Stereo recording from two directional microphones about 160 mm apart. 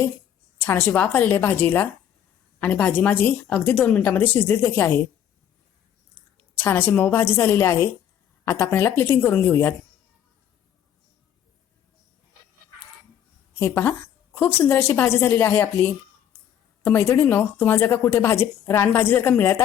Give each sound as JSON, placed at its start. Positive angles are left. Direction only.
{"t": 0.6, "sound": "speech", "side_deg": 15}
{"t": 6.6, "sound": "speech", "side_deg": 15}
{"t": 13.5, "sound": "a woman's voice", "side_deg": 15}